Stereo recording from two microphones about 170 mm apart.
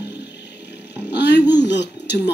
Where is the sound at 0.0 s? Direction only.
85° left.